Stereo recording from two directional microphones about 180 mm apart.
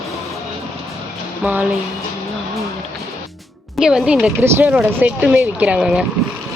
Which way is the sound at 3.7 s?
5° right (ahead or behind).